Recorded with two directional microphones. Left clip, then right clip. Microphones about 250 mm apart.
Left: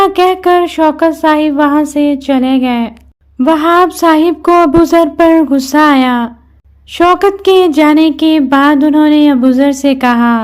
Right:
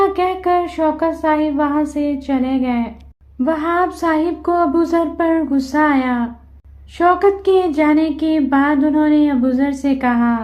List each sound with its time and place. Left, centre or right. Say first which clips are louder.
0.0 s speech: left 8 dB; left